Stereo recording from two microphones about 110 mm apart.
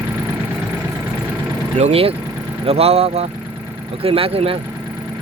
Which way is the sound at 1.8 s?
65° right (ahead or behind).